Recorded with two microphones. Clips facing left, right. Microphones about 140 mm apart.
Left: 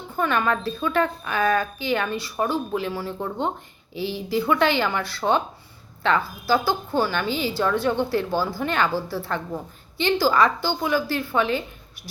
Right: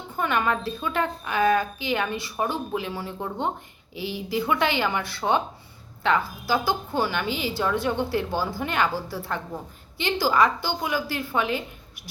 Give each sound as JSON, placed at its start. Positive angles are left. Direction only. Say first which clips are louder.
{"t": 0.2, "sound": "a woman's voice", "louder": "left 2 dB", "side_deg": -15}